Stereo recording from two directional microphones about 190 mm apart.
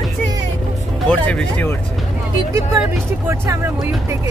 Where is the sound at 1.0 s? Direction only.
5° left (ahead or behind).